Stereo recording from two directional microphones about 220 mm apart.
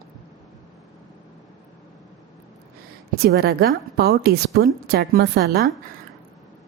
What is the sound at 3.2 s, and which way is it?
A woman's voice, 45° right (ahead or behind).